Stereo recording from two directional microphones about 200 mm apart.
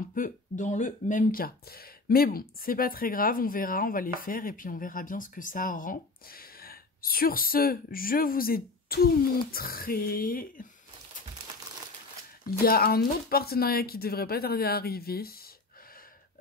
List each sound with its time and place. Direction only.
0.1 s speech: 40° left (ahead or behind)
12.6 s speech: 50° left (ahead or behind)